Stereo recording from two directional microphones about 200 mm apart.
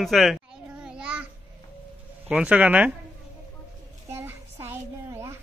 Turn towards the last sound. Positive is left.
turn(degrees=-15)  # may be behind; listen again after turning